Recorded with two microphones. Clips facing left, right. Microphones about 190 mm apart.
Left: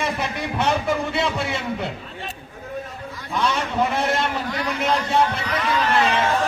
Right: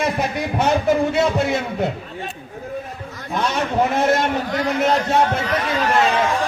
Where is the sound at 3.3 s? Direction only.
45° right (ahead or behind).